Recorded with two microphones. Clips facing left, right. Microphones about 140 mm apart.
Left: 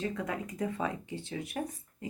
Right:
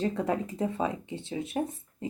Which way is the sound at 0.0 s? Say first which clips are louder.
Right 6 dB; 30° right (ahead or behind).